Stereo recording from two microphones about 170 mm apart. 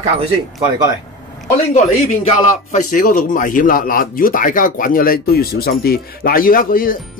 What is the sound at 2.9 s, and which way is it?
Speech, 55° left (ahead or behind).